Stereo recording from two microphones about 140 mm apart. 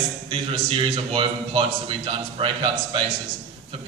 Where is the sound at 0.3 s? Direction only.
40° right (ahead or behind).